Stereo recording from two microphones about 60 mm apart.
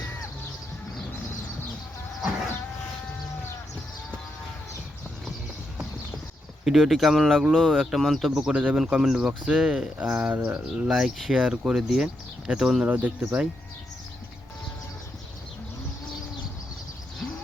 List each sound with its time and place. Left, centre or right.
6.7 s speech: centre
8.0 s speech: centre
8.4 s speech: centre
10.8 s speech: centre
12.8 s speech: right